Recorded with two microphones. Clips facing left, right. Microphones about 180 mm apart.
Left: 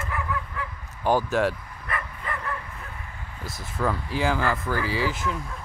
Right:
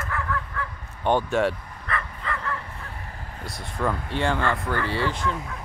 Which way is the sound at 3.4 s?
5° left (ahead or behind).